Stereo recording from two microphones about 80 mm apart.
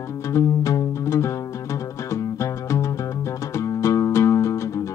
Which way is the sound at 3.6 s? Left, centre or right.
Left.